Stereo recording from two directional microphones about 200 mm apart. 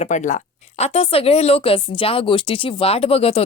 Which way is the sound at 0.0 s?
35° left (ahead or behind).